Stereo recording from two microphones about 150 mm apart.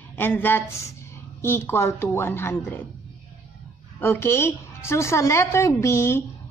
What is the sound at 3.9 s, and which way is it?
A woman's voice, 15° left (ahead or behind).